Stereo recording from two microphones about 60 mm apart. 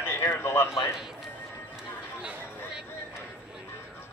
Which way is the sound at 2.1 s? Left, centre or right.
Centre.